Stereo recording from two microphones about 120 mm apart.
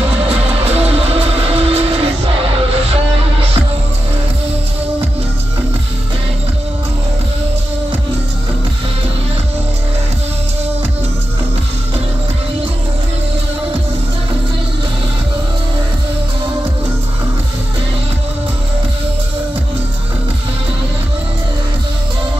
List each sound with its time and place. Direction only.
0.6 s music: 60° right (ahead or behind)
2.9 s music: 50° right (ahead or behind)